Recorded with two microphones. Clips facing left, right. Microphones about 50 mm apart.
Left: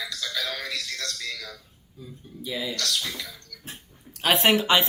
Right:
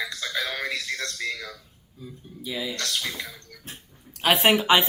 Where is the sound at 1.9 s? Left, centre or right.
Centre.